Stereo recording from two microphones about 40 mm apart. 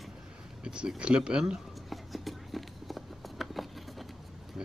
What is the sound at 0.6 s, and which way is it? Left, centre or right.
Speech, right.